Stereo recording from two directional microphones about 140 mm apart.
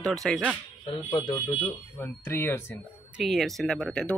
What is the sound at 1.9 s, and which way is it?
Speech, 15° left (ahead or behind).